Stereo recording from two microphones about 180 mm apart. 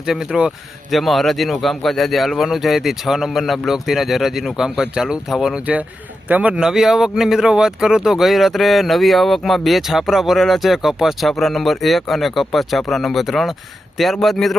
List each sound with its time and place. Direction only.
0.0 s speech: centre (ahead or behind)